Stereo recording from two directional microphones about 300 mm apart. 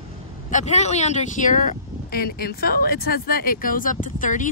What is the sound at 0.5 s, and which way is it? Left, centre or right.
Speech, left.